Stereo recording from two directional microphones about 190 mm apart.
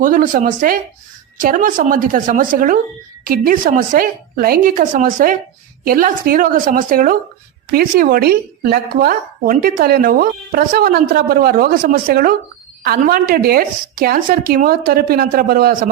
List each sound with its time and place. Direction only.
0.0 s a woman's voice: 45° right (ahead or behind)